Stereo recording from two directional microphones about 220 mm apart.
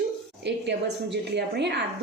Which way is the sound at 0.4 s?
50° right (ahead or behind).